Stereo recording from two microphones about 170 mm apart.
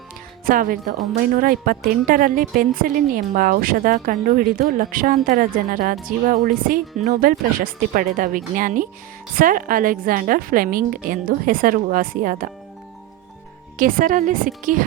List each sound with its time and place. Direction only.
0.4 s a woman's voice: 55° right (ahead or behind)
13.7 s speech: 55° right (ahead or behind)